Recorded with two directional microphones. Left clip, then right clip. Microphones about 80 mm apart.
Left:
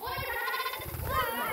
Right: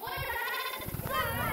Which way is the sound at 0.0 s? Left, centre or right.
Right.